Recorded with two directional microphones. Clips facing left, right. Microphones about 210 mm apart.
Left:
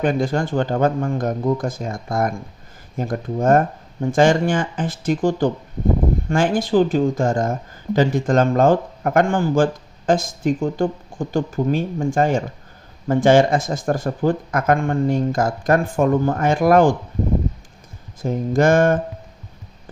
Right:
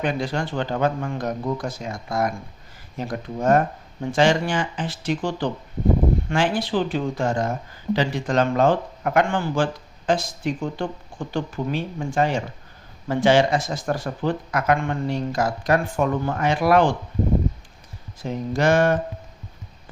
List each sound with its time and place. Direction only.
0.0 s speech: 45° left (ahead or behind)
18.2 s speech: 50° left (ahead or behind)